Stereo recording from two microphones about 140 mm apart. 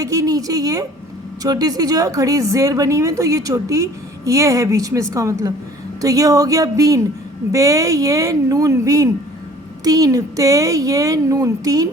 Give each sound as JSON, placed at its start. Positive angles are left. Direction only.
{"t": 0.0, "sound": "a woman's voice", "side_deg": -25}